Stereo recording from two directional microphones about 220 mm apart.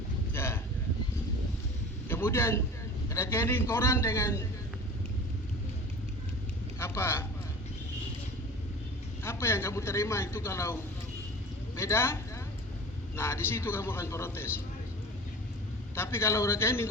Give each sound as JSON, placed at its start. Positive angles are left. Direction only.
{"t": 0.3, "sound": "a sound", "side_deg": 10}
{"t": 2.0, "sound": "a man's voice", "side_deg": 10}
{"t": 6.7, "sound": "a sound", "side_deg": 10}
{"t": 9.2, "sound": "a man's voice", "side_deg": 10}
{"t": 11.8, "sound": "a man's voice", "side_deg": 10}
{"t": 13.1, "sound": "a man's voice", "side_deg": 10}
{"t": 16.0, "sound": "a man's voice", "side_deg": 10}